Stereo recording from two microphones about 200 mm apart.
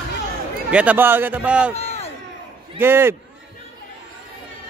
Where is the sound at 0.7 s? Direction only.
5° right (ahead or behind).